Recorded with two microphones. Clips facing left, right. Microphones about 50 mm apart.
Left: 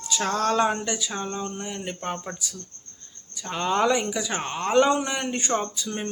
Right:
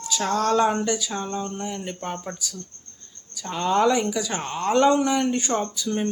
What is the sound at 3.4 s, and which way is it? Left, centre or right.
Speech, centre.